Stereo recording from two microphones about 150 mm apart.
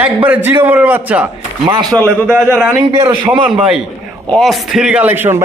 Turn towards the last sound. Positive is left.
turn(degrees=-15)  # may be behind; listen again after turning